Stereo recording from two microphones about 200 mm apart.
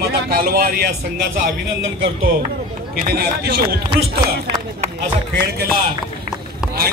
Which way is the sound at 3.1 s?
50° right (ahead or behind).